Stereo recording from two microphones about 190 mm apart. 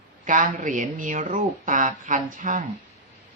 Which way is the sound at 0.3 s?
45° right (ahead or behind).